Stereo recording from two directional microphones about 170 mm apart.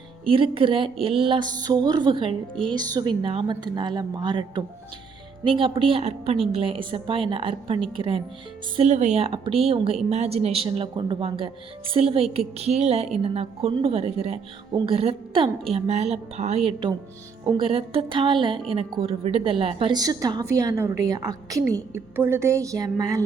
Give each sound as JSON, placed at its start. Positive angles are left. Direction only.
{"t": 0.3, "sound": "a woman's voice", "side_deg": -30}